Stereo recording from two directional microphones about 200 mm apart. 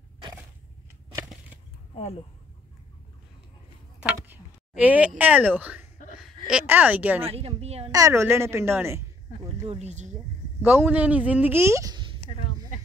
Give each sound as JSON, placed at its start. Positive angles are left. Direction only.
{"t": 4.0, "sound": "a sound", "side_deg": -5}
{"t": 5.6, "sound": "a woman's voice", "side_deg": -10}
{"t": 7.2, "sound": "a woman's voice", "side_deg": -30}
{"t": 7.9, "sound": "speech", "side_deg": -15}
{"t": 9.7, "sound": "a woman's voice", "side_deg": -35}
{"t": 10.6, "sound": "speech", "side_deg": -10}
{"t": 12.3, "sound": "a sound", "side_deg": 40}